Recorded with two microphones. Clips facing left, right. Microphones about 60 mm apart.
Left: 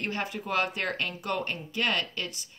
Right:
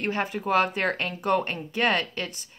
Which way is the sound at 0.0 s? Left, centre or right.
Right.